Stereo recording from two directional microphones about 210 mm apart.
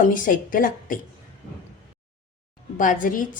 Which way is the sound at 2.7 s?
40° left (ahead or behind).